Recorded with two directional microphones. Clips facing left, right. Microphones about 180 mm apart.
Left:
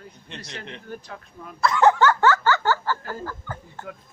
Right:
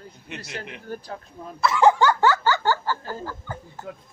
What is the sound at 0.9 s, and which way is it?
Speech, 40° right (ahead or behind).